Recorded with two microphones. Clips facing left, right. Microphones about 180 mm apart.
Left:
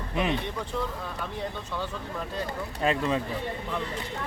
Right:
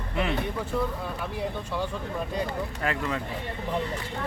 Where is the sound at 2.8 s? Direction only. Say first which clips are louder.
Left 6 dB; 20° left (ahead or behind).